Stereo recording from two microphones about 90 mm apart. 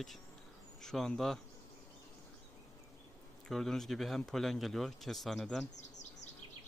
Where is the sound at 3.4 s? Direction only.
5° left (ahead or behind).